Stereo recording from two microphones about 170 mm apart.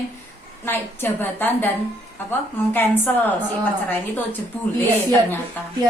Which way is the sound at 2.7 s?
10° left (ahead or behind).